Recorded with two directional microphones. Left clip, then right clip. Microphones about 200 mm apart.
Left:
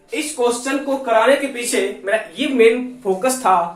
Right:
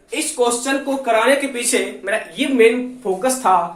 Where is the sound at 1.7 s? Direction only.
40° right (ahead or behind).